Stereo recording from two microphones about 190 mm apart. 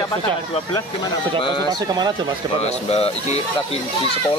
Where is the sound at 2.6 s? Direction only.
35° left (ahead or behind).